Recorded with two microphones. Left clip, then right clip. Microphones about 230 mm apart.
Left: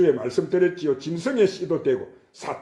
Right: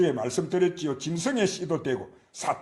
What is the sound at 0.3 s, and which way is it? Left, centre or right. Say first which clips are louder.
Speech: left 4 dB; right.